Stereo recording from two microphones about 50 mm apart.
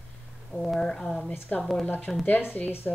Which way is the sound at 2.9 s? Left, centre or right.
Centre.